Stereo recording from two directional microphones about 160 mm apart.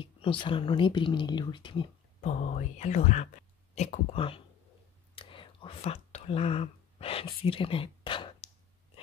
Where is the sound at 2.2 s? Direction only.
50° left (ahead or behind).